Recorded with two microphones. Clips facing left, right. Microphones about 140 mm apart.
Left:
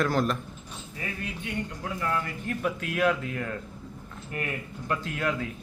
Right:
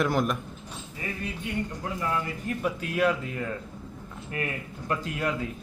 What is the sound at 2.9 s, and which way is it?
Speech, 5° right (ahead or behind).